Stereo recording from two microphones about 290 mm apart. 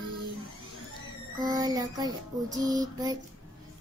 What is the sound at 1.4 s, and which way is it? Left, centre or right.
Child singing, centre.